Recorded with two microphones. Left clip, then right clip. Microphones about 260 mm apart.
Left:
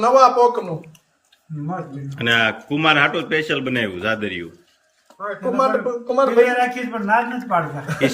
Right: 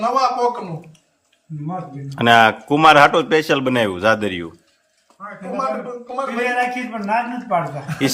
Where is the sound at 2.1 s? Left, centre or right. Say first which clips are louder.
Right 6 dB; centre.